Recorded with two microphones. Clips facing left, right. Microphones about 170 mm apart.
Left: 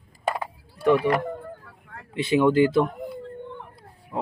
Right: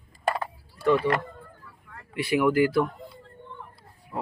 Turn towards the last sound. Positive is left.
turn(degrees=20)  # may be behind; listen again after turning